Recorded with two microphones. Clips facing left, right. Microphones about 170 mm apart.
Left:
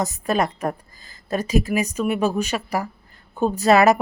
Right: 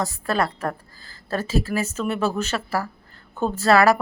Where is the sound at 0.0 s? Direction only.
20° left (ahead or behind).